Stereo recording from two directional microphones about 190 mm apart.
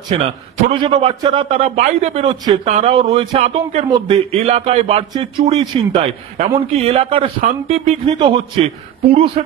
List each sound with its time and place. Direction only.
0.1 s a man's voice: 30° right (ahead or behind)